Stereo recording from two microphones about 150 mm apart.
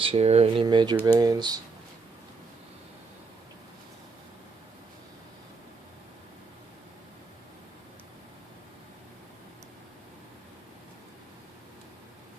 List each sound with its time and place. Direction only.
0.0 s speech: 40° right (ahead or behind)